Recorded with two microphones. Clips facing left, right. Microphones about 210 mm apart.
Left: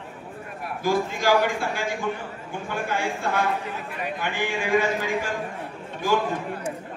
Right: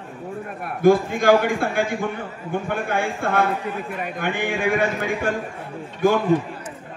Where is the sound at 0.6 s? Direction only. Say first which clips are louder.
Right 8 dB; 55° right (ahead or behind).